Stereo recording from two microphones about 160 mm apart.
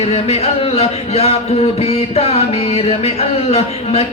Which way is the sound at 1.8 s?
40° left (ahead or behind).